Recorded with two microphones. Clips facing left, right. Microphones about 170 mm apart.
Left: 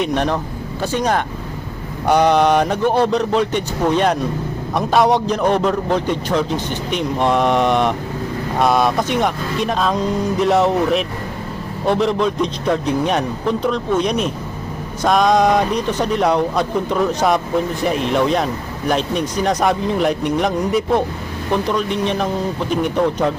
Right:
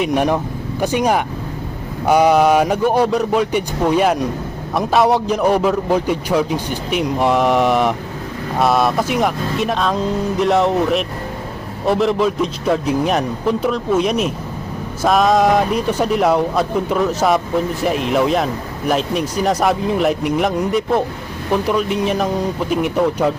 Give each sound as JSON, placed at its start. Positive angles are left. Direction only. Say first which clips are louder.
{"t": 0.0, "sound": "a man's voice", "louder": "right 2 dB", "side_deg": -10}